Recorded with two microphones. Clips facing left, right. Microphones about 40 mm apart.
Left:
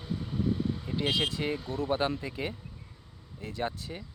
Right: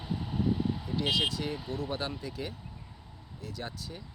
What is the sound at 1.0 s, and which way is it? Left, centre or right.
Speech, left.